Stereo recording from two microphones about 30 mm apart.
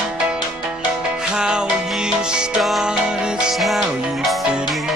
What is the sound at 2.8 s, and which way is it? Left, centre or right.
Music, right.